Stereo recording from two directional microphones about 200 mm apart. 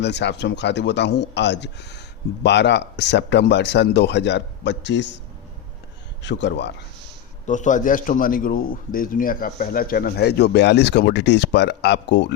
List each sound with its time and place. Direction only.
0.0 s speech: 60° left (ahead or behind)
6.2 s speech: 60° left (ahead or behind)
7.4 s a man's voice: 40° left (ahead or behind); by 12.3 s 60° left (ahead or behind)